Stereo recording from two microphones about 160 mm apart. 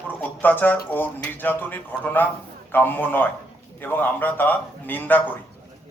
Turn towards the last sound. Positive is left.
turn(degrees=10)  # may be behind; listen again after turning